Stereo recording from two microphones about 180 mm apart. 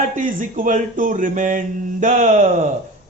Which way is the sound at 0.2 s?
50° right (ahead or behind).